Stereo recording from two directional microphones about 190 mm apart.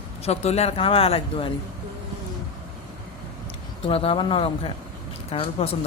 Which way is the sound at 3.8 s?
30° left (ahead or behind).